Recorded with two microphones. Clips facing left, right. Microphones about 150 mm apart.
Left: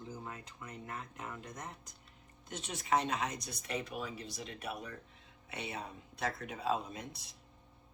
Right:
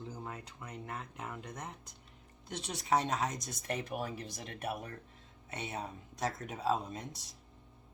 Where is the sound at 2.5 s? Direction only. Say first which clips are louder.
Right 1 dB; 35° right (ahead or behind); by 4.9 s 50° right (ahead or behind).